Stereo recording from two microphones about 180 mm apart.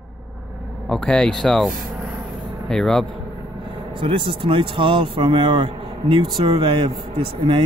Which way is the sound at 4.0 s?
30° right (ahead or behind).